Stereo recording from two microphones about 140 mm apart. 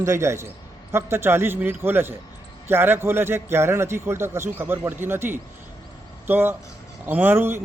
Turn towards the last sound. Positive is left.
turn(degrees=-15)  # may be behind; listen again after turning